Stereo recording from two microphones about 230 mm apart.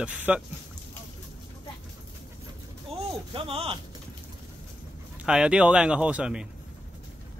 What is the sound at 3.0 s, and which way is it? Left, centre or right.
Speech, right.